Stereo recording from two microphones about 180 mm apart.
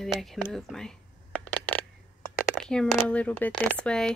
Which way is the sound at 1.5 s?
10° left (ahead or behind).